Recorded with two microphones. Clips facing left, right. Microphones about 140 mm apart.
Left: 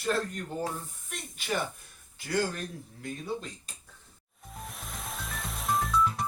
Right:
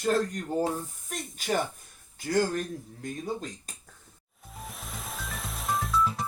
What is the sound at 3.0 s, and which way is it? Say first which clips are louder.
Speech: right 1 dB; 45° right (ahead or behind).